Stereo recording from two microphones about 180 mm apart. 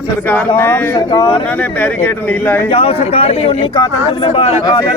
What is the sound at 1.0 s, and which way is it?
Speech, 25° left (ahead or behind).